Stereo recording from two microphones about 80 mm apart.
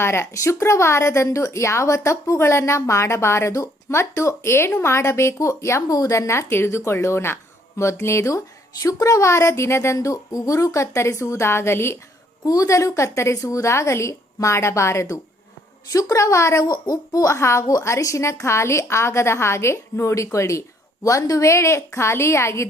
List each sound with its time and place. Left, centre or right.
0.0 s a woman's voice: left
12.5 s a woman's voice: left
16.6 s a child's voice: left
17.3 s a woman's voice: left